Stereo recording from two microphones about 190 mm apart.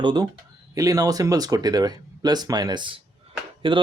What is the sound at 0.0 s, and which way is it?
Speech, 20° right (ahead or behind).